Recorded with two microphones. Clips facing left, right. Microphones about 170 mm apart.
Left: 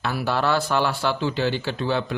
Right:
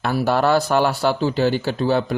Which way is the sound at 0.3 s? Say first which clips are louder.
Right 5 dB; 45° right (ahead or behind).